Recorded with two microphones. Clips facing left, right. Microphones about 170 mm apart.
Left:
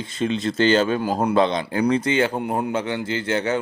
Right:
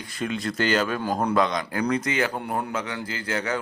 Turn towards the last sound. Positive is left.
turn(degrees=25)  # may be behind; listen again after turning